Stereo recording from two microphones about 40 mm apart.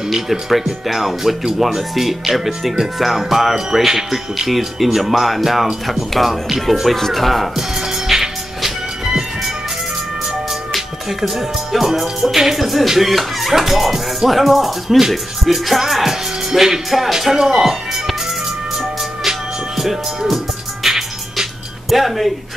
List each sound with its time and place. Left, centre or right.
0.1 s speech: centre
8.1 s music: centre
10.7 s speech: centre
19.8 s speech: centre
20.8 s music: centre